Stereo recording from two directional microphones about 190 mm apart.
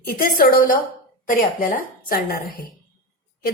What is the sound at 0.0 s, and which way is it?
A woman's voice, 50° left (ahead or behind).